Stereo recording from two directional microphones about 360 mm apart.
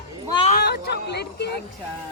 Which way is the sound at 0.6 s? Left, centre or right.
Left.